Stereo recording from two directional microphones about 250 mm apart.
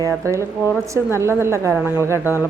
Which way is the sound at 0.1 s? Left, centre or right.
Centre.